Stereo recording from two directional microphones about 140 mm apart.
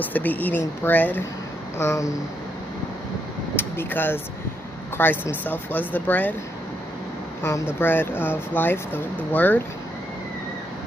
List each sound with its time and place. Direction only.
0.0 s speech: 10° left (ahead or behind)
1.8 s a sound: 20° left (ahead or behind)
3.5 s speech: 15° left (ahead or behind)
7.8 s speech: 15° left (ahead or behind)